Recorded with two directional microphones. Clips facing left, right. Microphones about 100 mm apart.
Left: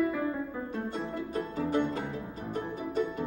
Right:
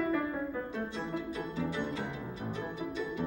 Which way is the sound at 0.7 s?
50° left (ahead or behind).